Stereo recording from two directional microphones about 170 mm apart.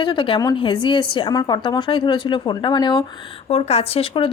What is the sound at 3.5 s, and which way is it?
Speech, 35° left (ahead or behind).